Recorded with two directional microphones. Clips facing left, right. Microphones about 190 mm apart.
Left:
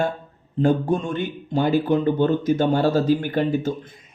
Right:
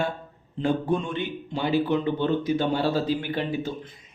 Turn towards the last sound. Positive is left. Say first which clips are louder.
# left 6 dB
turn(degrees=45)  # may be behind; listen again after turning